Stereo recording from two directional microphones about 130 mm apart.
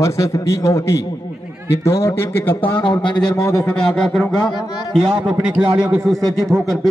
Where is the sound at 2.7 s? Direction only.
35° left (ahead or behind).